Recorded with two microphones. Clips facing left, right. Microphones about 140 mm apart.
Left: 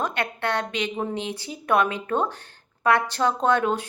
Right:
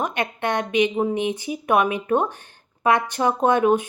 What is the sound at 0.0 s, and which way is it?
Speech, 15° right (ahead or behind).